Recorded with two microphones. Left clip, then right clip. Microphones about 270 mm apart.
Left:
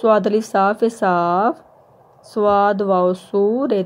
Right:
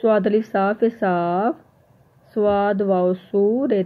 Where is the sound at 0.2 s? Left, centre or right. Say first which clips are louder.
Left 1 dB; centre.